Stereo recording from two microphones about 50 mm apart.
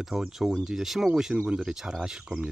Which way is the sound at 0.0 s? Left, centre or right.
Centre.